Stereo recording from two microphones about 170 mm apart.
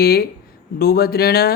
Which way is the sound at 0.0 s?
65° left (ahead or behind).